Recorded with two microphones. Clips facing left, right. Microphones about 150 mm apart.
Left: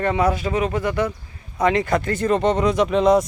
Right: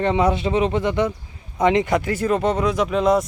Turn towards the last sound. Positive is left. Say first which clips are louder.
# left 2 dB
turn(degrees=0)  # may be behind; listen again after turning